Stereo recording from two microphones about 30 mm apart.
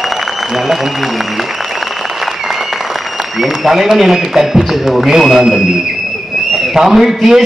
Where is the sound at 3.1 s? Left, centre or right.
Centre.